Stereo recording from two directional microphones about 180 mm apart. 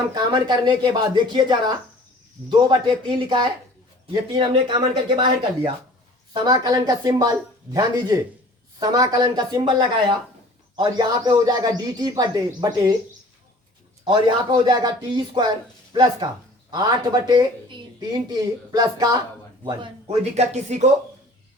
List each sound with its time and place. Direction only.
0.1 s speech: 25° right (ahead or behind)
6.3 s speech: 20° right (ahead or behind)
14.0 s speech: 25° right (ahead or behind)
19.6 s speech: 30° right (ahead or behind)